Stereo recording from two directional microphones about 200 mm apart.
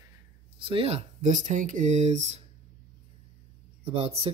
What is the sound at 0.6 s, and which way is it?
Speech, 25° right (ahead or behind).